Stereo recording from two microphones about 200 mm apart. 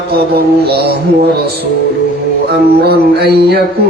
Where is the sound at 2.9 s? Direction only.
50° right (ahead or behind).